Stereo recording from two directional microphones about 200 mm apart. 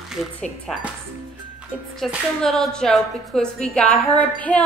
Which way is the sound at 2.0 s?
Centre (ahead or behind).